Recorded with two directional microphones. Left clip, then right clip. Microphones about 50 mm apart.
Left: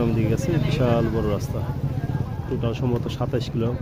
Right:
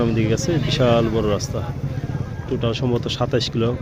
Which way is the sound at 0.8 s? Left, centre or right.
Right.